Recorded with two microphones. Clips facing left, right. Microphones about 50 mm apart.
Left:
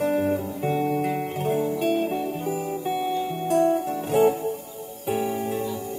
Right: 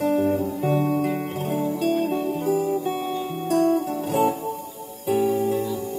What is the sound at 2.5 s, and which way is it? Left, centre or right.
Music, centre.